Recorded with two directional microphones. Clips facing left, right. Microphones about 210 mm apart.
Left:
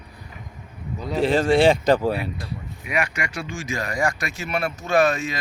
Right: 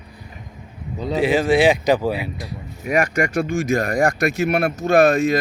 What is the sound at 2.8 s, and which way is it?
Speech, 45° right (ahead or behind).